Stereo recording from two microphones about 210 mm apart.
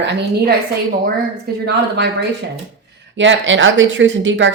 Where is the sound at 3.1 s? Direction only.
60° right (ahead or behind).